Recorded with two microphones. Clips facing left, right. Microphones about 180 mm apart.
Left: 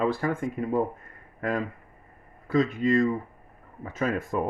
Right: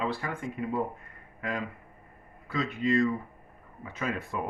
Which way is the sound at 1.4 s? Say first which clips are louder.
Left 5 dB; 45° left (ahead or behind).